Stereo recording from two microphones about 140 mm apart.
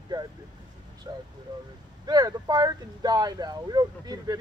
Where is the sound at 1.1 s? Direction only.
30° right (ahead or behind).